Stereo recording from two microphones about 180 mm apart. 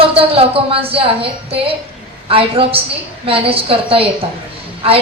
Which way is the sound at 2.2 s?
30° right (ahead or behind).